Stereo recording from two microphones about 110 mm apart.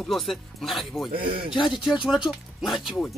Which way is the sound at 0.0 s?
Centre (ahead or behind).